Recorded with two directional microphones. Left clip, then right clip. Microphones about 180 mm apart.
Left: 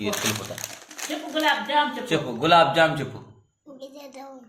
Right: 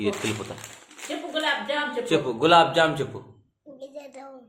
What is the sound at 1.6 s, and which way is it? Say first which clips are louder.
Speech: left 4 dB; 30° right (ahead or behind).